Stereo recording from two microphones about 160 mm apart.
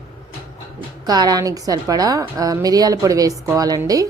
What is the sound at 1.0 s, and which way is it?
Speech, 25° right (ahead or behind).